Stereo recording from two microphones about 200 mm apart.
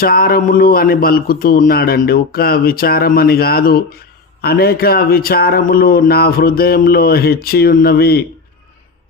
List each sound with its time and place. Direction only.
0.0 s speech: 45° left (ahead or behind)